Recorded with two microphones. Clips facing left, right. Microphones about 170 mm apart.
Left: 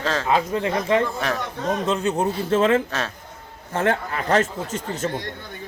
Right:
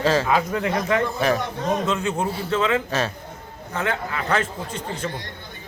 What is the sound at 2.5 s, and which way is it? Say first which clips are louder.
Speech: left 4 dB; 45° left (ahead or behind).